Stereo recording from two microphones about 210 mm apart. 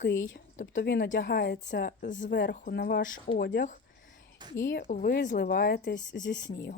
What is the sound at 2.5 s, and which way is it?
Speech, 45° left (ahead or behind).